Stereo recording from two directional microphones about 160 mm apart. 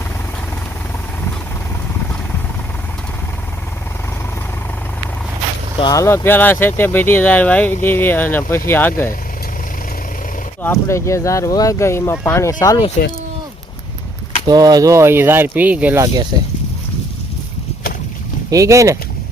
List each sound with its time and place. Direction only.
5.8 s speech: 20° left (ahead or behind)
10.6 s speech: 15° left (ahead or behind)
14.4 s speech: 25° right (ahead or behind); by 16.0 s 10° right (ahead or behind)
16.3 s a sound: 25° right (ahead or behind)
18.5 s speech: 20° right (ahead or behind)